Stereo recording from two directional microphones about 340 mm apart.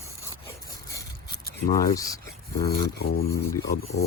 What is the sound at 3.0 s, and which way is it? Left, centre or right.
Speech, left.